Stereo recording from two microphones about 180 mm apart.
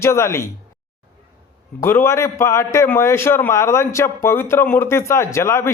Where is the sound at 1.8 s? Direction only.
15° left (ahead or behind).